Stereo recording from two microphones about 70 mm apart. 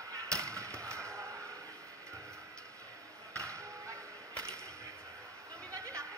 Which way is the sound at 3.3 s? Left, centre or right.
Right.